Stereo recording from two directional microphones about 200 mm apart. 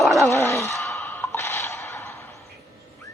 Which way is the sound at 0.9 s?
10° left (ahead or behind).